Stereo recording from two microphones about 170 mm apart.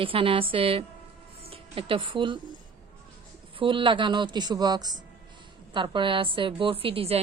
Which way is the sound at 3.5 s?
30° right (ahead or behind).